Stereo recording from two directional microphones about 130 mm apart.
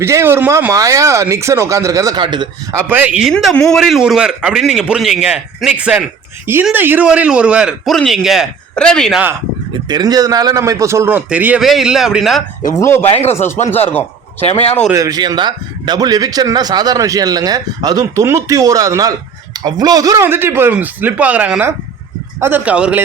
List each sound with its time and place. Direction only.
0.0 s speech: 20° right (ahead or behind)
2.2 s a man's voice: 35° right (ahead or behind)
2.7 s speech: 15° right (ahead or behind)
3.3 s a man's voice: 5° left (ahead or behind)
9.9 s a man's voice: 30° right (ahead or behind); by 12.4 s centre (ahead or behind)
12.6 s speech: 20° left (ahead or behind)
14.9 s speech: 30° right (ahead or behind); by 23.0 s 10° right (ahead or behind)